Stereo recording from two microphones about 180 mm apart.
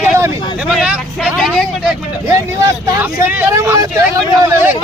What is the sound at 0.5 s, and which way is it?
Vehicle, 5° right (ahead or behind).